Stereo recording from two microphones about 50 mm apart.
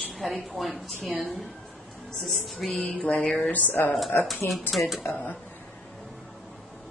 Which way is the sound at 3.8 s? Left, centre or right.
Left.